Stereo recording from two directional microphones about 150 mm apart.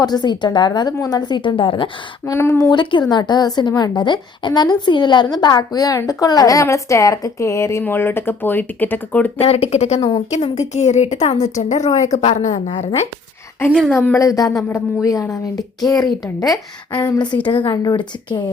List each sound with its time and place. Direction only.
0.0 s a woman's voice: 30° left (ahead or behind)
2.2 s speech: 15° left (ahead or behind)
3.1 s a woman's voice: 30° left (ahead or behind); by 9.3 s 10° left (ahead or behind)
9.4 s a woman's voice: 40° left (ahead or behind)
11.9 s a woman's voice: 20° left (ahead or behind)
12.1 s a woman's voice: 50° left (ahead or behind)
13.7 s a woman's voice: 5° right (ahead or behind)
13.9 s a woman's voice: 15° left (ahead or behind)